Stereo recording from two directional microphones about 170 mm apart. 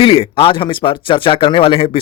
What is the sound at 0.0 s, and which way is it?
Speech, 35° left (ahead or behind).